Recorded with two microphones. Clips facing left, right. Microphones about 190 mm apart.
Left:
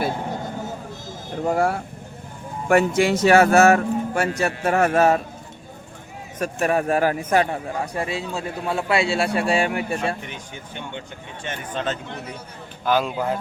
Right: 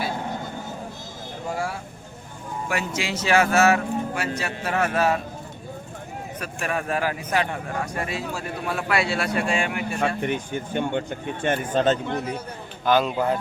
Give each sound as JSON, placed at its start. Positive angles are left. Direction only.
{"t": 1.5, "sound": "speech", "side_deg": 55}
{"t": 6.4, "sound": "a man's voice", "side_deg": 40}
{"t": 7.8, "sound": "speech", "side_deg": 25}
{"t": 10.2, "sound": "speech", "side_deg": -55}
{"t": 12.8, "sound": "a man's voice", "side_deg": 5}